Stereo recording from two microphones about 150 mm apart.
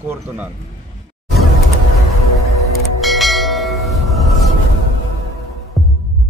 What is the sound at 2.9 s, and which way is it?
Bell, centre (ahead or behind).